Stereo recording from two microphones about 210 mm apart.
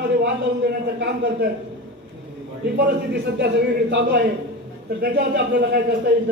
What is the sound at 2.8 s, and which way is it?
A man's voice, 55° right (ahead or behind).